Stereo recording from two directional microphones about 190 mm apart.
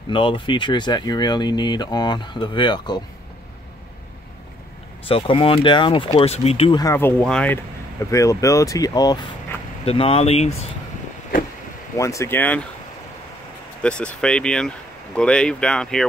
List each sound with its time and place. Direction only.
0.1 s speech: 25° left (ahead or behind)
5.0 s speech: 30° left (ahead or behind)
6.8 s speech: 15° left (ahead or behind)
9.8 s speech: 30° left (ahead or behind)
12.0 s speech: 15° left (ahead or behind)
13.8 s speech: 5° left (ahead or behind)